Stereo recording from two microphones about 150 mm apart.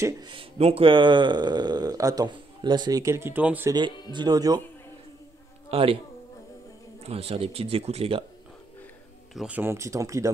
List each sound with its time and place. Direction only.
0.0 s speech: 30° right (ahead or behind); by 3.7 s 10° right (ahead or behind)
4.1 s speech: 30° right (ahead or behind)
5.7 s speech: 40° right (ahead or behind)
7.0 s speech: 40° right (ahead or behind)
9.3 s speech: centre (ahead or behind)
9.6 s speech: 20° right (ahead or behind)